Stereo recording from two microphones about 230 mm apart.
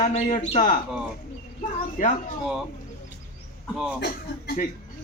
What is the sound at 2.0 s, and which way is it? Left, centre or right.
Speech, left.